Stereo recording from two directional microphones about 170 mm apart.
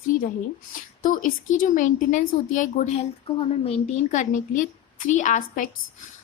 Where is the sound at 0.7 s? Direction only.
50° left (ahead or behind).